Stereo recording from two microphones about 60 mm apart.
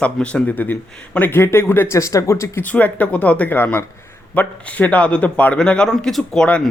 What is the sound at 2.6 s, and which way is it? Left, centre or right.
Speech, left.